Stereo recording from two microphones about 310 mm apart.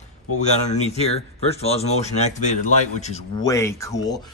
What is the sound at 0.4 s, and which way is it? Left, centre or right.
A man's voice, left.